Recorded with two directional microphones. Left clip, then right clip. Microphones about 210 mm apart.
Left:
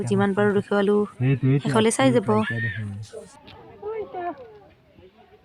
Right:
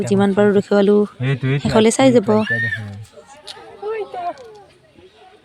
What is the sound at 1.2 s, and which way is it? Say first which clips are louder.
Speech: right 2 dB; 70° right (ahead or behind).